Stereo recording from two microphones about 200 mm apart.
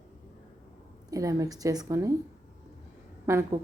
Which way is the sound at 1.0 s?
15° right (ahead or behind).